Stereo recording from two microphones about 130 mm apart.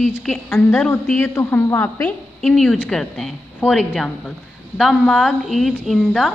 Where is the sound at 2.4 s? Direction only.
5° left (ahead or behind).